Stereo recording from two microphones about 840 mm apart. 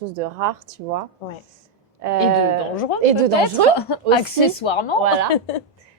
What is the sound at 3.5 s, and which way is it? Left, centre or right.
A woman's voice, left.